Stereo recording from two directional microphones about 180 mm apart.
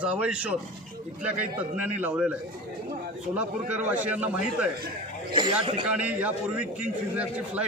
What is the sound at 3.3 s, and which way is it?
Speech, 10° right (ahead or behind).